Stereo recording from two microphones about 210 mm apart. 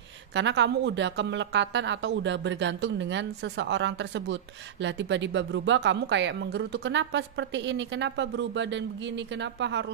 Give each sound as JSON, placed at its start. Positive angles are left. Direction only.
{"t": 0.3, "sound": "speech", "side_deg": -60}